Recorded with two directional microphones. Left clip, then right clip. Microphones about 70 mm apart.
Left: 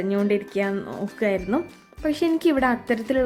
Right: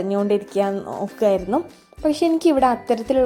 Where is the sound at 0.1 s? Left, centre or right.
Centre.